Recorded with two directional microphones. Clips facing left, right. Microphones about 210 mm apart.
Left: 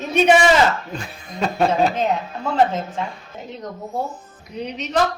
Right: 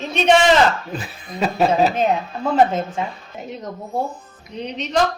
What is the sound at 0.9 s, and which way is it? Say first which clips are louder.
Speech: right 2 dB; 5° right (ahead or behind).